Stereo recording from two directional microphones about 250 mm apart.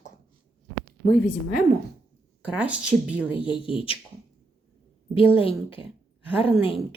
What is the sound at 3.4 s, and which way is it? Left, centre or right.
Speech, centre.